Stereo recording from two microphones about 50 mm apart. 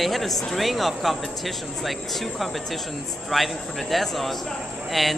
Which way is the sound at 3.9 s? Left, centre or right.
Centre.